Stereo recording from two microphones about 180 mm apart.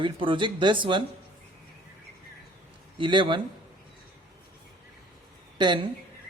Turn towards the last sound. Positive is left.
turn(degrees=-25)  # may be behind; listen again after turning